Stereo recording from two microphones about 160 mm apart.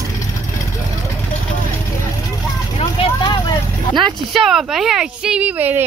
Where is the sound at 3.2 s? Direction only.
25° left (ahead or behind).